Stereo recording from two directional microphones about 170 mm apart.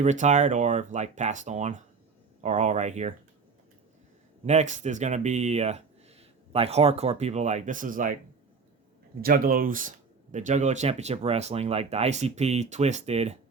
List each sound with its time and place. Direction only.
0.0 s speech: 45° right (ahead or behind)
4.4 s speech: 45° right (ahead or behind)
9.2 s speech: 60° right (ahead or behind); by 13.4 s 40° right (ahead or behind)